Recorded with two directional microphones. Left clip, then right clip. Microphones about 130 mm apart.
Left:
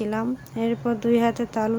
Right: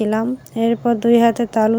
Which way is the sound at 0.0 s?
40° right (ahead or behind).